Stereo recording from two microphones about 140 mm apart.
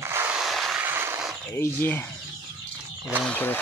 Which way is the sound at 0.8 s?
15° right (ahead or behind).